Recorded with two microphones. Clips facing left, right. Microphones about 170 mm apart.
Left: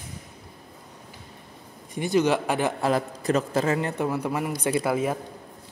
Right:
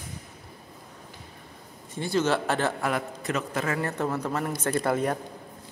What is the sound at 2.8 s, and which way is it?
A man's voice, 35° left (ahead or behind).